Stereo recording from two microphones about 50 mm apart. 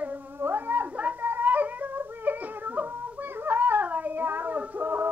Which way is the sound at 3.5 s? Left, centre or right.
Right.